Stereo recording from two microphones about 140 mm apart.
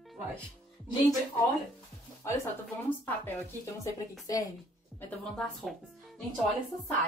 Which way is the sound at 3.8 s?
25° left (ahead or behind).